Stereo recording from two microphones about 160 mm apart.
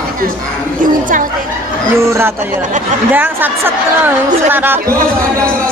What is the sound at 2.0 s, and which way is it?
Speech, 15° right (ahead or behind).